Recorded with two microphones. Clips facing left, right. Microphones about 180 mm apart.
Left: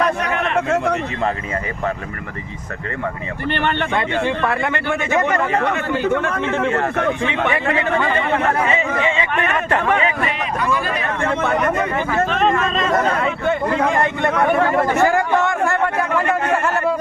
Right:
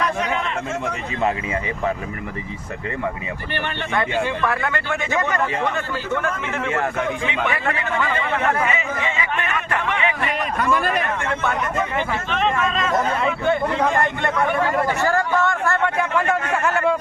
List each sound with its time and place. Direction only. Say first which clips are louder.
0.0 s a sound: left 3 dB; 65° left (ahead or behind)
3.5 s speech: left 7 dB; 60° left (ahead or behind)
4.4 s speech: left 3 dB; 20° left (ahead or behind)
5.5 s speech: left 5 dB; 65° left (ahead or behind)
7.3 s speech: left 3 dB; 25° left (ahead or behind)
9.6 s speech: left 4 dB; 40° left (ahead or behind)
10.6 s speech: right 2 dB; 50° right (ahead or behind)
12.2 s speech: left 6 dB; 40° left (ahead or behind)
13.4 s speech: left 1 dB; 5° left (ahead or behind)
14.3 s speech: left 4 dB; 60° left (ahead or behind)
15.4 s a sound: left 2 dB; 15° left (ahead or behind)
16.5 s speech: left 2 dB; 10° left (ahead or behind)